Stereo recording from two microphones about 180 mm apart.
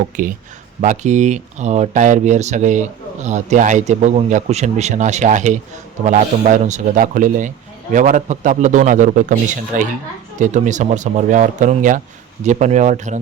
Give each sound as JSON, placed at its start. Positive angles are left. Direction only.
{"t": 0.2, "sound": "speech", "side_deg": -50}